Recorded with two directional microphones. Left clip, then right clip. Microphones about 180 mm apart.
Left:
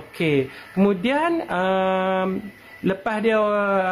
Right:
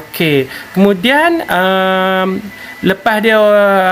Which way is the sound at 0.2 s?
10° right (ahead or behind).